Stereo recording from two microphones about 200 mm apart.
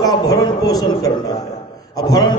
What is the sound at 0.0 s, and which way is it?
A man's voice, 20° left (ahead or behind).